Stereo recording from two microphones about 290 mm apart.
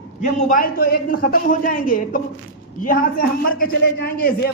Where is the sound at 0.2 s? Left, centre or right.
Left.